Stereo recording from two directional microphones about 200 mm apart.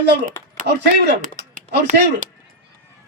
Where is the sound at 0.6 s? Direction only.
60° right (ahead or behind).